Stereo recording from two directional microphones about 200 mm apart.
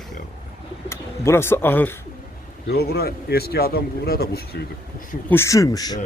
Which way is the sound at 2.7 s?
50° left (ahead or behind).